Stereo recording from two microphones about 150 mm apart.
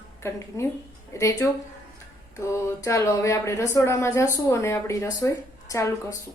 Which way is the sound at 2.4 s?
20° left (ahead or behind).